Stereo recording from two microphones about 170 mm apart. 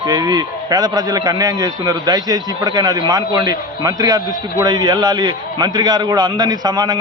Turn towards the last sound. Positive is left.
turn(degrees=-25)  # may be behind; listen again after turning